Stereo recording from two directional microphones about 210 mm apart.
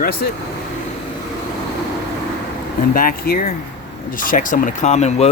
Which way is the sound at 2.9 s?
45° left (ahead or behind).